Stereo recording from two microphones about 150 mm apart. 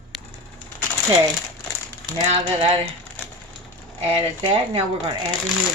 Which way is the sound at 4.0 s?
35° right (ahead or behind).